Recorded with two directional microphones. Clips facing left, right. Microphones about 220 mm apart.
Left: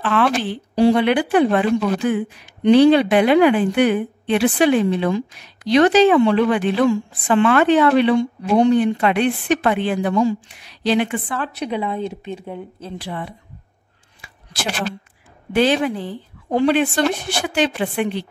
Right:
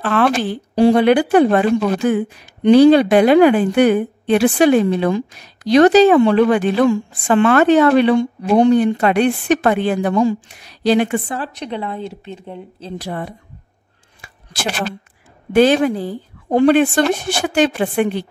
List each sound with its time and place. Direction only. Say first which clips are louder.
0.0 s a woman's voice: right 2 dB; 45° right (ahead or behind)
11.5 s speech: left 2 dB; 10° left (ahead or behind)
12.9 s a woman's voice: right 4 dB; 45° right (ahead or behind)
14.2 s a sound: right 3 dB; 50° right (ahead or behind)
15.5 s a woman's voice: right 5 dB; 45° right (ahead or behind)